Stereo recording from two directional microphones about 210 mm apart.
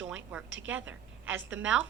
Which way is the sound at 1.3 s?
65° right (ahead or behind).